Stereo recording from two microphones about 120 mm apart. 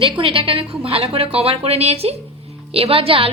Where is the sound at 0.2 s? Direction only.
50° right (ahead or behind).